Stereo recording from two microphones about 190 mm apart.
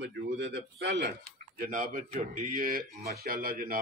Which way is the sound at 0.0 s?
70° right (ahead or behind).